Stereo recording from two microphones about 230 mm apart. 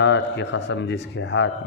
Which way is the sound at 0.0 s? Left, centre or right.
Left.